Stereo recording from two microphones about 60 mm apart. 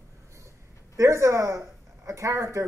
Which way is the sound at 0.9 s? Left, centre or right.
Right.